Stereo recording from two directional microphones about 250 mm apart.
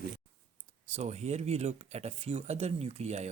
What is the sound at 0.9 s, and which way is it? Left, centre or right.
Speech, right.